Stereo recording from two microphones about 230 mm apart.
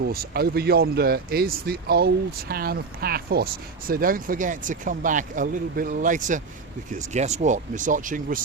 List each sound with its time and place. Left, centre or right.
0.0 s speech: right